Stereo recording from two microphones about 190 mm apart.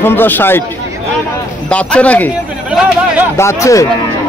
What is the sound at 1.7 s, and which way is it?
Speech, 5° left (ahead or behind).